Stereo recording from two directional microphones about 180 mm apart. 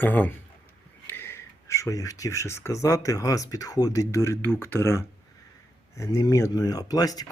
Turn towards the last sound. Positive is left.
turn(degrees=20)  # may be behind; listen again after turning